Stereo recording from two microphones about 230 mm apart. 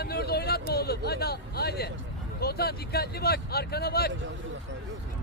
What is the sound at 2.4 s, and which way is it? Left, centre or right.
Speech, left.